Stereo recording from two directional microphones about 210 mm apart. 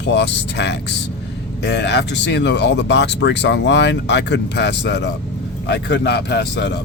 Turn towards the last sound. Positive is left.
turn(degrees=55)  # may be behind; listen again after turning